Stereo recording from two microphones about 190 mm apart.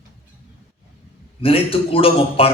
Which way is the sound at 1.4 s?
30° left (ahead or behind).